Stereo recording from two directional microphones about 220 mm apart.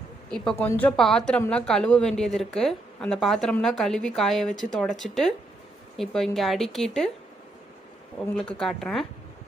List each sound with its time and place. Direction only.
0.3 s a woman's voice: 5° left (ahead or behind)
8.4 s a woman's voice: 5° left (ahead or behind)